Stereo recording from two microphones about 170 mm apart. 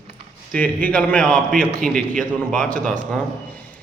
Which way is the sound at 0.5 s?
10° left (ahead or behind).